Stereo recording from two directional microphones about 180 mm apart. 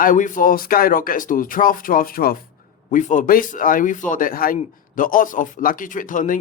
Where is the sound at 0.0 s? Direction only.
45° left (ahead or behind).